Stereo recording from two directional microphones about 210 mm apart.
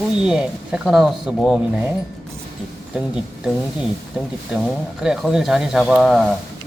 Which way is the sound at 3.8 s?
Centre (ahead or behind).